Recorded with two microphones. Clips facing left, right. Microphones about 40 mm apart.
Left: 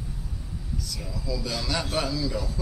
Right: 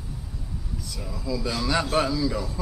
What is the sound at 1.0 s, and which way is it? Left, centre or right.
Speech, centre.